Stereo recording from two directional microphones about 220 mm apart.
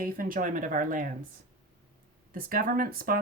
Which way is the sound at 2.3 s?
40° right (ahead or behind).